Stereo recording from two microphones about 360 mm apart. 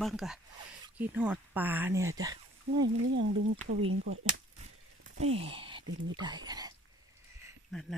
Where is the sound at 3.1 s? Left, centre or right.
Right.